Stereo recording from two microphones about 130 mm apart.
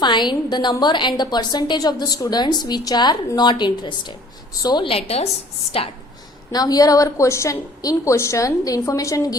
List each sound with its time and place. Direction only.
0.0 s a woman's voice: 35° left (ahead or behind)
6.5 s a woman's voice: 30° left (ahead or behind)